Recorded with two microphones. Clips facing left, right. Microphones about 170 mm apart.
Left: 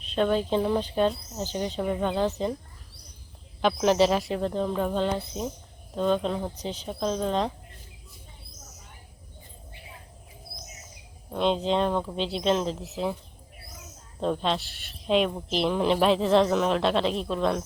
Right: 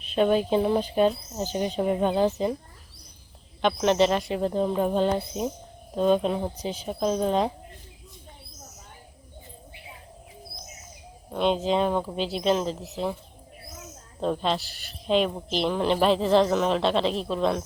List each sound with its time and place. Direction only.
0.1 s speech: 10° right (ahead or behind)
3.6 s speech: centre (ahead or behind)
4.4 s speech: 10° right (ahead or behind)
11.3 s speech: centre (ahead or behind)
14.2 s speech: centre (ahead or behind)